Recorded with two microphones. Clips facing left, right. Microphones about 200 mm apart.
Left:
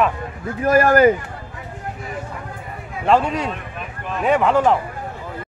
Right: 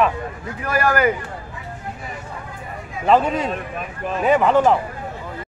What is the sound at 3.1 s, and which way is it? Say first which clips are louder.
Speech: right 1 dB; centre (ahead or behind).